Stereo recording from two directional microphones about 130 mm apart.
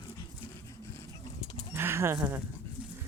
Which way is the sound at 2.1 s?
10° right (ahead or behind).